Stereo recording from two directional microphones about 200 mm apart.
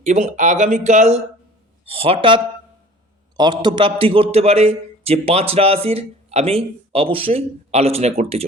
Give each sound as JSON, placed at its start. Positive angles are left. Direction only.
{"t": 0.0, "sound": "a man's voice", "side_deg": -35}